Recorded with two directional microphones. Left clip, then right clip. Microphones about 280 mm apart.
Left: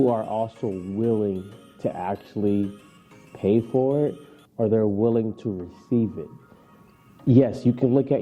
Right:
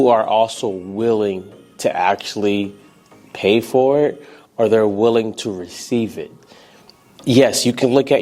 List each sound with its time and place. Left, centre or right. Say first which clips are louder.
0.3 s speech: right 11 dB; right
1.8 s speech: right 11 dB; centre
3.7 s speech: right 8 dB; right
4.5 s speech: right 8 dB; centre
4.9 s speech: right 7 dB; right
5.1 s speech: right 7 dB; centre
7.3 s speech: right 7 dB; centre